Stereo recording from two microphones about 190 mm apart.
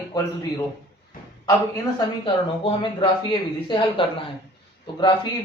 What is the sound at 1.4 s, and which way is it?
A man's voice, 20° left (ahead or behind).